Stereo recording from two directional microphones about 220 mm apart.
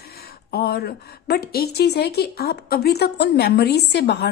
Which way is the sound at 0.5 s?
45° left (ahead or behind).